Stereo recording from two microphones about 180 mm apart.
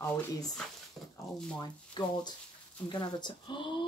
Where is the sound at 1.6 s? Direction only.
25° left (ahead or behind).